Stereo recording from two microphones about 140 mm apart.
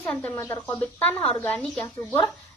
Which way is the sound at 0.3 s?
20° left (ahead or behind).